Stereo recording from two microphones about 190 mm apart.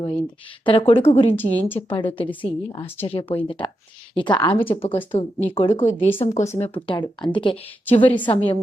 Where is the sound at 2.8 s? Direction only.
30° left (ahead or behind).